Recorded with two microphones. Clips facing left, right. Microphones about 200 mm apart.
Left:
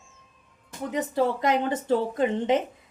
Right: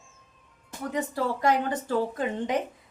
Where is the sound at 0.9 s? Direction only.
20° left (ahead or behind).